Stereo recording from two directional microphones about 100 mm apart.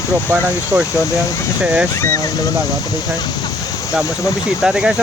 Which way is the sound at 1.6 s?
10° right (ahead or behind).